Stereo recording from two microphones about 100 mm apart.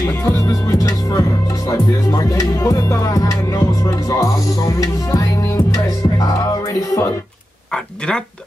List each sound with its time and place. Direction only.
0.1 s music: 20° left (ahead or behind)
0.4 s music: 35° left (ahead or behind)